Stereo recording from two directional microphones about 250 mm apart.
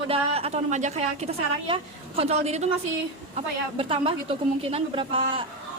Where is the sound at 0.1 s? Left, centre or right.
Right.